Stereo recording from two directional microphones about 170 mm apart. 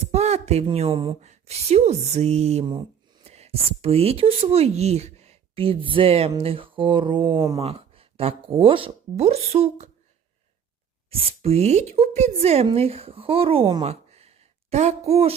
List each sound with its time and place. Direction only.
0.0 s a woman's voice: 40° right (ahead or behind)
11.1 s speech: 35° right (ahead or behind)
13.8 s a sound: 40° right (ahead or behind)